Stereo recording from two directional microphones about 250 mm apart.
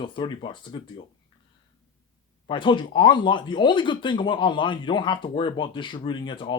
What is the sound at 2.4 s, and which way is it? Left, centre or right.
Speech, centre.